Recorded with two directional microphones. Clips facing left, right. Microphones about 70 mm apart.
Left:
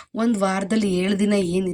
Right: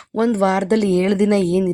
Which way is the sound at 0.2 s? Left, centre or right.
Right.